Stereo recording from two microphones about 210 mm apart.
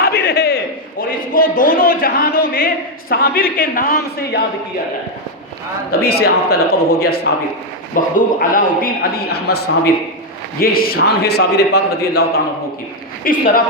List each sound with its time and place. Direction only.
0.0 s a sound: 50° left (ahead or behind)
3.1 s speech: 45° left (ahead or behind)
5.9 s speech: 50° left (ahead or behind)